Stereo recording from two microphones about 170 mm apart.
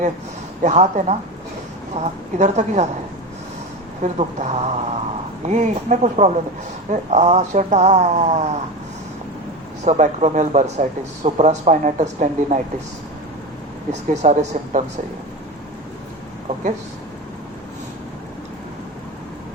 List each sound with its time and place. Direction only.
0.6 s speech: 40° right (ahead or behind)
4.0 s speech: 40° right (ahead or behind)
9.8 s speech: 40° right (ahead or behind)
14.1 s speech: 45° right (ahead or behind)